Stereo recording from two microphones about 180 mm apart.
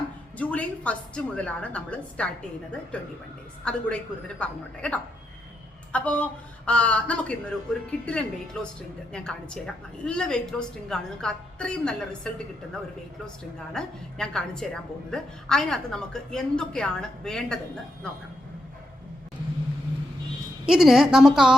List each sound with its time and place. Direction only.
0.3 s a woman's voice: 5° left (ahead or behind)
13.7 s a woman's voice: 5° left (ahead or behind)
20.7 s a woman's voice: 5° right (ahead or behind)